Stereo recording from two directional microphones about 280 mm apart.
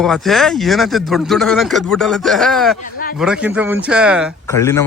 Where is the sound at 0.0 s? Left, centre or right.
Centre.